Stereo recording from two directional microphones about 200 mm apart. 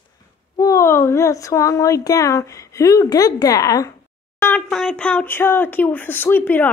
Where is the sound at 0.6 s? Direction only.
15° left (ahead or behind).